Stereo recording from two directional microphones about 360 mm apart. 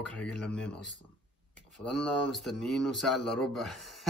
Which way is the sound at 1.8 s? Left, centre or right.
Centre.